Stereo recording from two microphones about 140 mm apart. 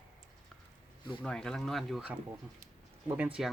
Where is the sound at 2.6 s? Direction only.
15° right (ahead or behind).